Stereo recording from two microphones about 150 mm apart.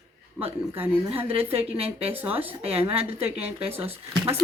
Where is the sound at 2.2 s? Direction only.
10° right (ahead or behind).